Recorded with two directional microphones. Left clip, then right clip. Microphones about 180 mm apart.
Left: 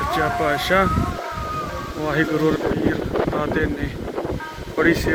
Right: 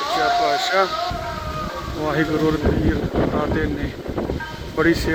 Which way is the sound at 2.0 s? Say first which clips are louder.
Even; 10° left (ahead or behind).